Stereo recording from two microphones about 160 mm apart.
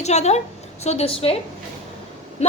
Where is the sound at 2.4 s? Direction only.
45° left (ahead or behind).